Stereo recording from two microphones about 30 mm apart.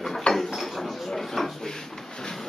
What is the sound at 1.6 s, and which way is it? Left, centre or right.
Drawer open or close, left.